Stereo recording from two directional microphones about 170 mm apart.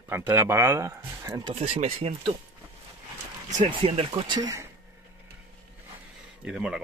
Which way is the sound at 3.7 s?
30° right (ahead or behind).